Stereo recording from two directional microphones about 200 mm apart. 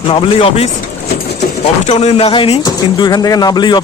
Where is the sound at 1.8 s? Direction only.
35° left (ahead or behind).